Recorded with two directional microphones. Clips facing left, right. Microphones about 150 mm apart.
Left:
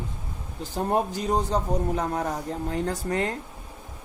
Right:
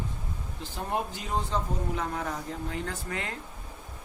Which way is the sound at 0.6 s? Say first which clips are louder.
Left 7 dB; 40° left (ahead or behind).